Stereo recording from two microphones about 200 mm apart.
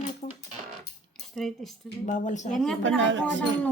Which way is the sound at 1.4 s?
Centre (ahead or behind).